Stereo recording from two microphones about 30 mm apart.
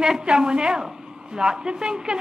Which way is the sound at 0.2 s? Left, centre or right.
Right.